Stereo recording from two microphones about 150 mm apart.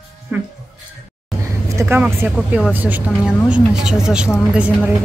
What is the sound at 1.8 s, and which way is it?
A woman's voice, 15° right (ahead or behind).